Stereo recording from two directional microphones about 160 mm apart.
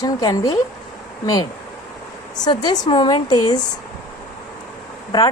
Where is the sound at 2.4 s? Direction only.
25° left (ahead or behind).